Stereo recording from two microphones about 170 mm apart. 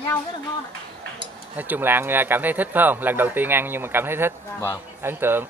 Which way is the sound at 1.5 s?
10° right (ahead or behind).